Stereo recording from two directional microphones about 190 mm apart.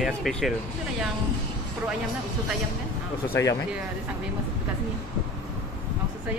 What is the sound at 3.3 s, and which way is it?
Speech, 15° left (ahead or behind).